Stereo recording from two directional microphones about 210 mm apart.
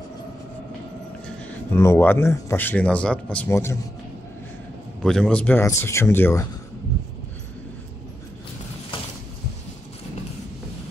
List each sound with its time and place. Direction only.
1.7 s speech: 10° left (ahead or behind)
5.0 s speech: 5° left (ahead or behind)